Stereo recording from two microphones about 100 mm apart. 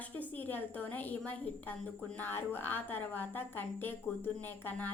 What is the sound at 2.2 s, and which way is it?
A woman's voice, 20° left (ahead or behind).